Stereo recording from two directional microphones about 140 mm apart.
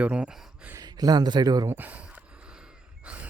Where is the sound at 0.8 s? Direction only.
25° right (ahead or behind).